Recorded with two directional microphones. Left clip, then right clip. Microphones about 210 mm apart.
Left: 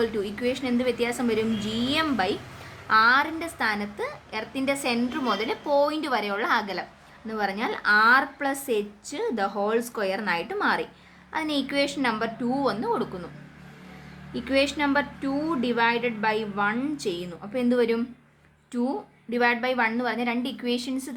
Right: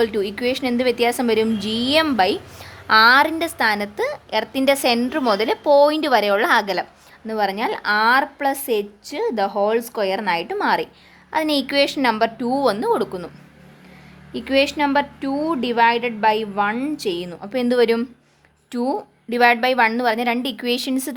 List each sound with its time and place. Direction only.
0.0 s a woman's voice: 35° right (ahead or behind)
14.3 s a woman's voice: 35° right (ahead or behind)